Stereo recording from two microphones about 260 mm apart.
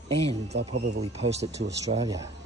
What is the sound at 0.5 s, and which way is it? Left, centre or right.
Speech, right.